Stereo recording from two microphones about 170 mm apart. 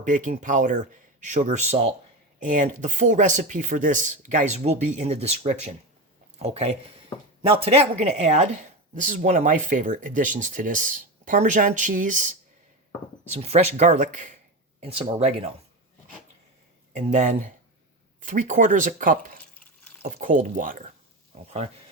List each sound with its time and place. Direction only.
0.0 s speech: 50° right (ahead or behind)
2.4 s speech: 50° right (ahead or behind)
14.8 s speech: 35° right (ahead or behind)
16.9 s speech: 45° right (ahead or behind)